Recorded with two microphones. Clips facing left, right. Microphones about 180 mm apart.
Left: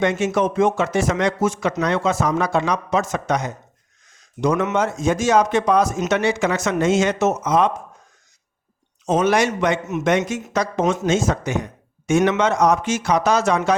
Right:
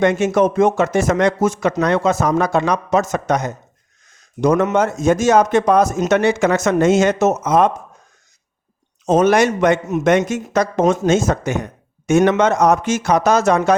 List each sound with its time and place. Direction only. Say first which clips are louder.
0.0 s speech: right 4 dB; 50° right (ahead or behind)
9.0 s speech: right 4 dB; 45° right (ahead or behind)